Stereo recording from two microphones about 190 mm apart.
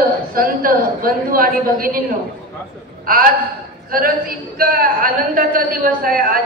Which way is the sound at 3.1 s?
50° right (ahead or behind).